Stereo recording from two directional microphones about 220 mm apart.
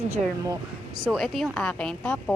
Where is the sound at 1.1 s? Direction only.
Centre (ahead or behind).